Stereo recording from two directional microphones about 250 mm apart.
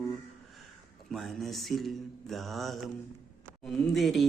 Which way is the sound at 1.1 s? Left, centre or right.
Centre.